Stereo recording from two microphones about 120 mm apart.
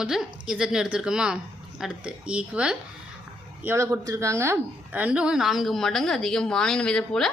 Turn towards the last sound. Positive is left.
turn(degrees=5)  # may be behind; listen again after turning